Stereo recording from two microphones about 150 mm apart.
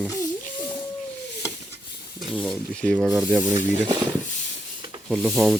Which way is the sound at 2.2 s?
Centre (ahead or behind).